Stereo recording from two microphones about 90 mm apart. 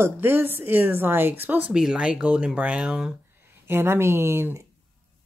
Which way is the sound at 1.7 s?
10° right (ahead or behind).